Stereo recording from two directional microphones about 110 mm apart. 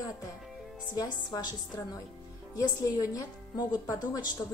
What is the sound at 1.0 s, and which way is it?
A woman's voice, 35° left (ahead or behind).